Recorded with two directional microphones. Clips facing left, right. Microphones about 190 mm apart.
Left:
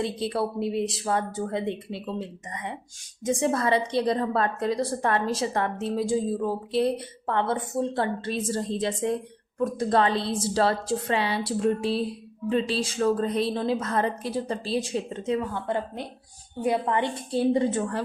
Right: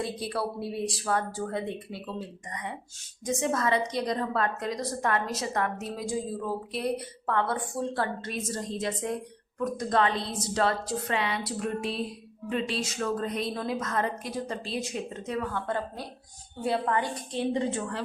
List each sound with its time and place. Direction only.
0.0 s a woman's voice: 25° left (ahead or behind)
3.2 s a woman's voice: 35° left (ahead or behind)
15.4 s a woman's voice: 15° left (ahead or behind); by 18.0 s 45° left (ahead or behind)